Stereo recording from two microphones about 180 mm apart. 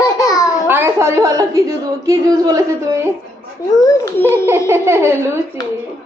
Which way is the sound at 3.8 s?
20° left (ahead or behind).